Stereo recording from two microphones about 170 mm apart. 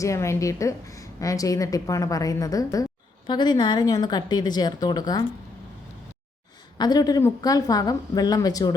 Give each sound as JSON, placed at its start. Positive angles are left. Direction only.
{"t": 0.0, "sound": "a woman's voice", "side_deg": 15}
{"t": 6.7, "sound": "a woman's voice", "side_deg": 25}